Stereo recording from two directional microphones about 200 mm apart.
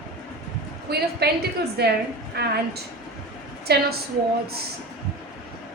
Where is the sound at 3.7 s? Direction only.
50° right (ahead or behind).